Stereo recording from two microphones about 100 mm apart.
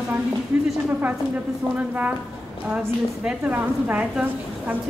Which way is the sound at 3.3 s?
15° right (ahead or behind).